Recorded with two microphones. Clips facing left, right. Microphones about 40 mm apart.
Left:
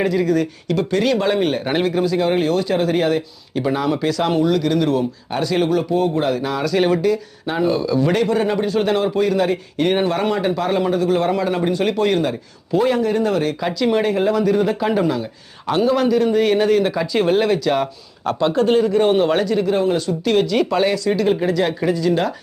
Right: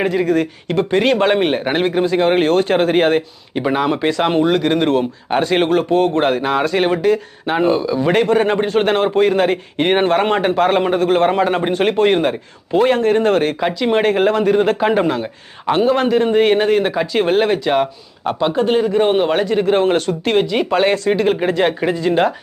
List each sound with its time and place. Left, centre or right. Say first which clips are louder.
0.0 s a man's voice: right 2 dB; right
3.5 s a man's voice: right 2 dB; right
8.1 s a man's voice: right 3 dB; right
13.6 s a man's voice: right 2 dB; right
14.0 s a man's voice: right 3 dB; right
19.7 s speech: right 3 dB; right
20.2 s a man's voice: left 2 dB; right
20.7 s a man's voice: right 7 dB; right